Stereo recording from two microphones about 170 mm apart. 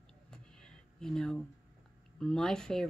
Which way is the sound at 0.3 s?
5° left (ahead or behind).